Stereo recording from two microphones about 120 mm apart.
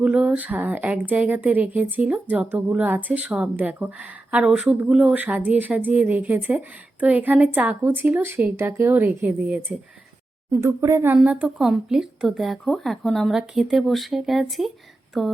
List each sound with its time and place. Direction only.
0.0 s a woman's voice: 10° right (ahead or behind)
11.1 s a woman's voice: 10° right (ahead or behind)